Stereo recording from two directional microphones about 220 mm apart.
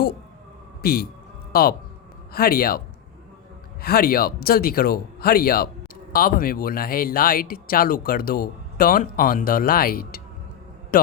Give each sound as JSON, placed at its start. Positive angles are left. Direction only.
{"t": 0.8, "sound": "a man's voice", "side_deg": 45}